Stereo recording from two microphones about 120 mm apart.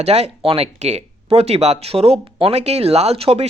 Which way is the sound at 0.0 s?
60° right (ahead or behind).